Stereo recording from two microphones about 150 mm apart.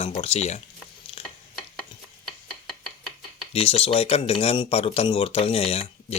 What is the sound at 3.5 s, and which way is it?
Speech, 40° left (ahead or behind).